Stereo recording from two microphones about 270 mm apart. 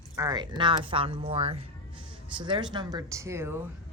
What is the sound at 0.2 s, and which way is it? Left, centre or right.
A woman's voice, centre.